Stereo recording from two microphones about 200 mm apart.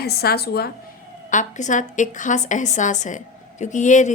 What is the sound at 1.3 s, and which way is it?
A woman's voice, 40° left (ahead or behind).